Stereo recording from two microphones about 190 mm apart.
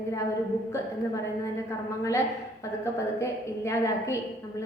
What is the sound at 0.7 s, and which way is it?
A woman's voice, 15° left (ahead or behind).